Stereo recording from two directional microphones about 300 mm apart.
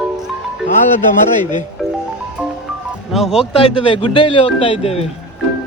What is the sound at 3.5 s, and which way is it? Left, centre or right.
Speech, centre.